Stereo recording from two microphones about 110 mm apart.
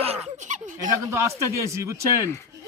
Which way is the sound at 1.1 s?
25° right (ahead or behind).